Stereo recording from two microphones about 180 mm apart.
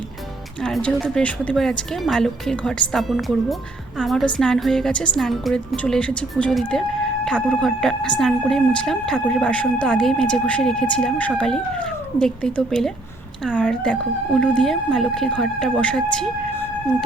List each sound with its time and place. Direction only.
0.6 s speech: 5° left (ahead or behind)